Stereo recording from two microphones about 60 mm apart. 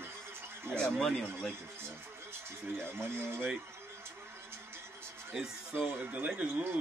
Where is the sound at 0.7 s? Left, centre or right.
Centre.